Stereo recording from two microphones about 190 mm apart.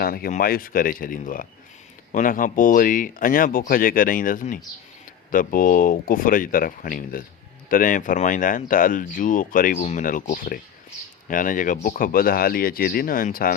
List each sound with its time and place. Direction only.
0.0 s speech: 50° left (ahead or behind)